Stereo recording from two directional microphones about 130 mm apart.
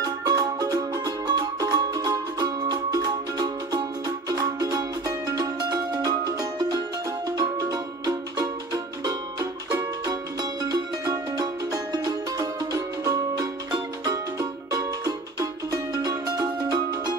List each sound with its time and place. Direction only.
0.0 s music: 30° right (ahead or behind)